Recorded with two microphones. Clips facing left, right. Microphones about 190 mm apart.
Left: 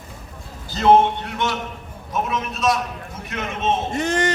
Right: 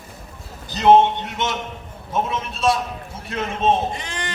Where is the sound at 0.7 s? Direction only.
20° right (ahead or behind).